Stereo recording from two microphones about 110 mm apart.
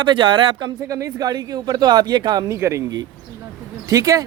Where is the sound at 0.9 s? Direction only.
30° right (ahead or behind).